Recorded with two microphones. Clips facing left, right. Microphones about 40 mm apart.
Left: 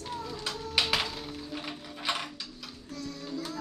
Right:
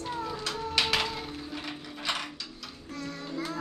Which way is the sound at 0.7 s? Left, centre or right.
Centre.